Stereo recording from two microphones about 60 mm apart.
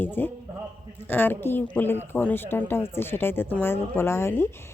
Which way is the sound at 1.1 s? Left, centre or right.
Left.